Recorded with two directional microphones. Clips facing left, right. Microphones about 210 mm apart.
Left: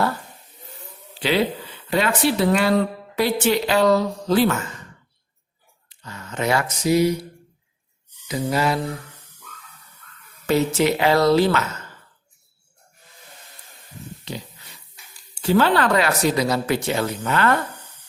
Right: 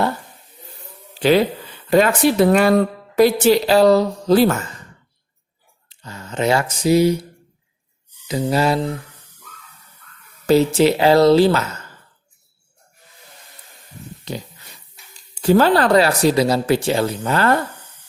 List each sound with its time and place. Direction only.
1.9 s a woman's voice: 45° right (ahead or behind)
5.9 s speech: 30° right (ahead or behind)
8.3 s mantra: 25° right (ahead or behind)
10.4 s a woman's voice: 30° right (ahead or behind)
15.4 s a woman's voice: 40° right (ahead or behind)